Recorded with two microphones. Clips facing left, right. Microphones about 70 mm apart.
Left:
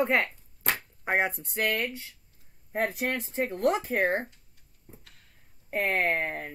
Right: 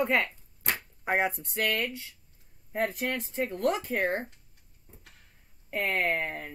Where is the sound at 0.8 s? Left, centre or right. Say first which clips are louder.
Even; centre.